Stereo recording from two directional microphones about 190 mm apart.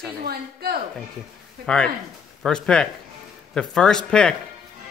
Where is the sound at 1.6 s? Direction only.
5° left (ahead or behind).